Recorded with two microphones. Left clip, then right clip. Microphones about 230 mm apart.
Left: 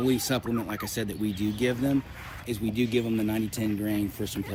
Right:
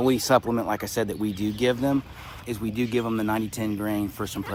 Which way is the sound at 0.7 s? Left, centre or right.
Centre.